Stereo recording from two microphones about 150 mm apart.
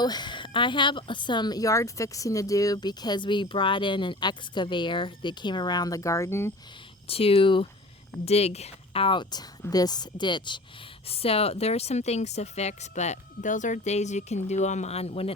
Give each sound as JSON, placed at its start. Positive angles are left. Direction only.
{"t": 0.0, "sound": "a woman's voice", "side_deg": 30}
{"t": 7.1, "sound": "a woman's voice", "side_deg": 40}